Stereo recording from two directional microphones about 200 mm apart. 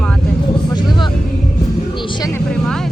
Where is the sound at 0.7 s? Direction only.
20° left (ahead or behind).